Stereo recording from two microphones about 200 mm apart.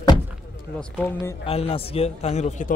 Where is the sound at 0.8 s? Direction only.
10° left (ahead or behind).